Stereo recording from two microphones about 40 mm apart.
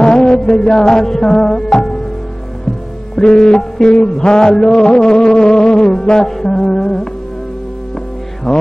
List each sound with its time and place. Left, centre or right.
0.0 s music: centre
3.2 s music: centre
8.5 s music: centre